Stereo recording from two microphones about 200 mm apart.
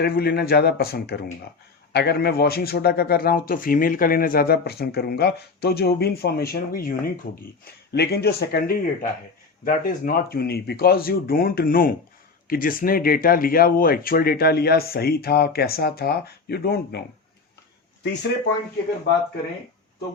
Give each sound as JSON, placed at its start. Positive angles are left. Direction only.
{"t": 0.0, "sound": "a man's voice", "side_deg": 50}
{"t": 18.0, "sound": "speech", "side_deg": 60}